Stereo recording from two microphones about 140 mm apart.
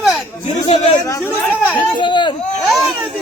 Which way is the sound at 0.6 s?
50° left (ahead or behind).